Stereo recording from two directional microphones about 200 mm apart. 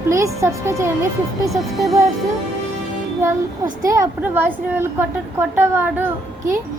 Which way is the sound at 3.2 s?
15° right (ahead or behind).